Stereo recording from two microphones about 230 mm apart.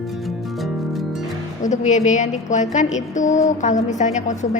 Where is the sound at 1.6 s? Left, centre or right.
Left.